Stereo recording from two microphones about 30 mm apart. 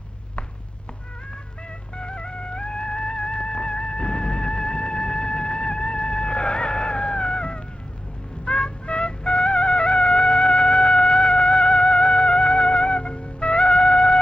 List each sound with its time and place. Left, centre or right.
2.0 s music: left